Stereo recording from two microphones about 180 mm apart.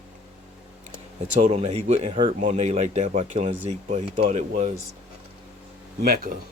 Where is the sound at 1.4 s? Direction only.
40° right (ahead or behind).